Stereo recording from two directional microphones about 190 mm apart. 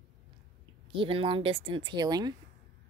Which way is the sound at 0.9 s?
30° right (ahead or behind).